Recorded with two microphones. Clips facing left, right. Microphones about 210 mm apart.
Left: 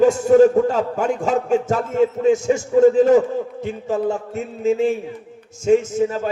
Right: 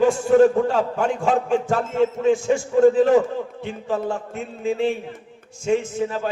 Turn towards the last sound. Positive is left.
turn(degrees=45)  # may be behind; listen again after turning